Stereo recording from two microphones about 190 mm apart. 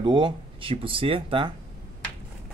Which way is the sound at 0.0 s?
25° right (ahead or behind).